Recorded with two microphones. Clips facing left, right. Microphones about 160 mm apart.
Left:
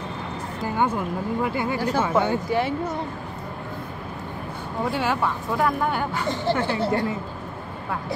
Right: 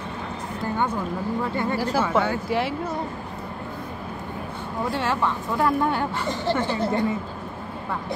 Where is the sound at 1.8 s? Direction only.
5° right (ahead or behind).